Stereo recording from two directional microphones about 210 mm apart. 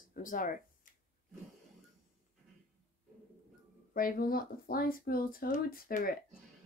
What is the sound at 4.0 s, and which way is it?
A woman's voice, 45° left (ahead or behind).